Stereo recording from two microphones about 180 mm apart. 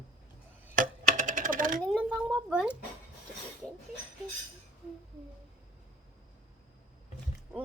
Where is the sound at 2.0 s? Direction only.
10° right (ahead or behind).